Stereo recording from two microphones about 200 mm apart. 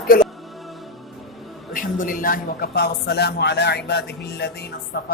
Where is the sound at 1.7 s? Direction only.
45° left (ahead or behind).